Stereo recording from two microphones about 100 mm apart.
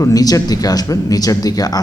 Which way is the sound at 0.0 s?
35° left (ahead or behind).